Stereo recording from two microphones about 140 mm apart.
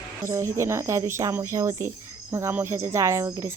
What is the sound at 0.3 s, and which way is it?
Speech, 20° right (ahead or behind).